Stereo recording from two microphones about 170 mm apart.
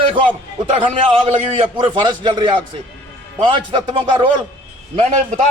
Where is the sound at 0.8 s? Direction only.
30° right (ahead or behind).